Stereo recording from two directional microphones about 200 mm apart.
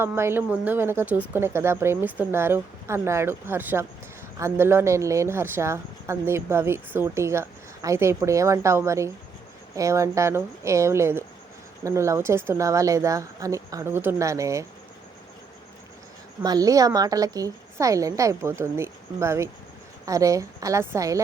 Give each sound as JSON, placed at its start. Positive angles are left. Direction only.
{"t": 0.0, "sound": "speech", "side_deg": -10}
{"t": 16.4, "sound": "speech", "side_deg": -20}